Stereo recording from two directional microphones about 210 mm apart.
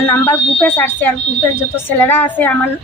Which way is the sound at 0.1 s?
10° left (ahead or behind).